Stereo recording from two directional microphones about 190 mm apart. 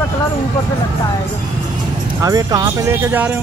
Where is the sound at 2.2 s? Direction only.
20° right (ahead or behind).